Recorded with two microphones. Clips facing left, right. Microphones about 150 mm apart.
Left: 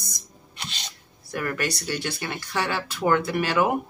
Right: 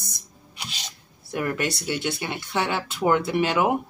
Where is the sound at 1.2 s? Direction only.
20° right (ahead or behind).